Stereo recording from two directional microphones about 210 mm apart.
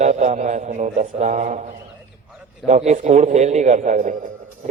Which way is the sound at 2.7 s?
35° right (ahead or behind).